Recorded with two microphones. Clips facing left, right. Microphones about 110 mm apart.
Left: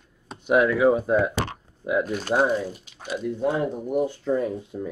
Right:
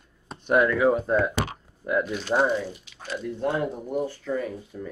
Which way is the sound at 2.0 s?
45° left (ahead or behind).